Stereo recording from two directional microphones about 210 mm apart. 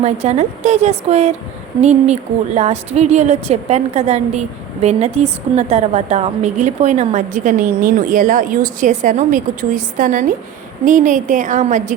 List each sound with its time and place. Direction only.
0.0 s a woman's voice: 30° right (ahead or behind)